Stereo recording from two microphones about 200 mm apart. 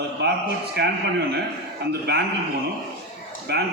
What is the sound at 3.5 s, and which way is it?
Speech, 55° right (ahead or behind).